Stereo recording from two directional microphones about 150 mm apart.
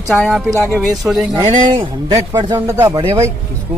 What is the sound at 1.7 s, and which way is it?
A man's voice, 30° right (ahead or behind).